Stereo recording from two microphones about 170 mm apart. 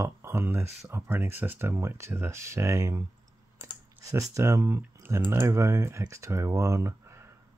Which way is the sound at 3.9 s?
20° right (ahead or behind).